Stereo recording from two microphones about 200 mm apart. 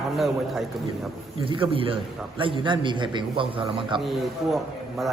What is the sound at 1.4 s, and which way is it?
A man's voice, 25° right (ahead or behind).